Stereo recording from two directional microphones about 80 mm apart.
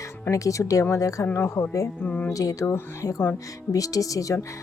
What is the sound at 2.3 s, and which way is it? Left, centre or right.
Speech, left.